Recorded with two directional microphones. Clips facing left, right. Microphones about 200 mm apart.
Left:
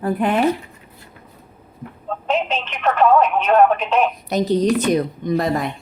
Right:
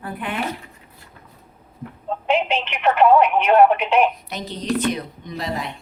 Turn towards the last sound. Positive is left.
turn(degrees=50)  # may be behind; listen again after turning